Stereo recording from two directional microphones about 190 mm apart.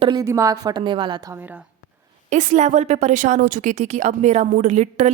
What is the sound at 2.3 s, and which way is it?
Speech, 40° right (ahead or behind).